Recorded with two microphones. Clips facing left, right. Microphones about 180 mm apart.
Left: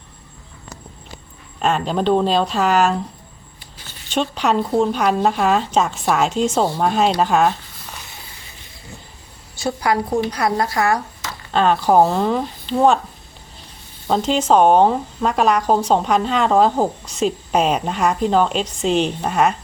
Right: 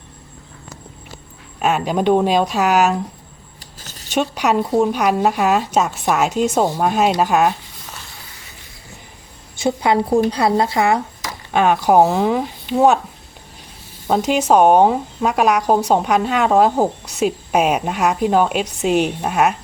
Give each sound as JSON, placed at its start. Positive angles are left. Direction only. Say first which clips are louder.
{"t": 1.5, "sound": "speech", "louder": "right 1 dB", "side_deg": -5}
{"t": 3.8, "sound": "a sound", "louder": "right 2 dB", "side_deg": -45}
{"t": 4.1, "sound": "speech", "louder": "right 1 dB", "side_deg": -10}
{"t": 9.6, "sound": "speech", "louder": "right 3 dB", "side_deg": -25}
{"t": 11.3, "sound": "speech", "louder": "right 1 dB", "side_deg": -10}
{"t": 14.3, "sound": "a woman's voice", "louder": "right 1 dB", "side_deg": -10}